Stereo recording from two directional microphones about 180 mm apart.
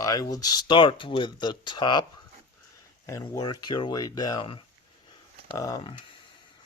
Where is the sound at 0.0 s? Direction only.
20° left (ahead or behind).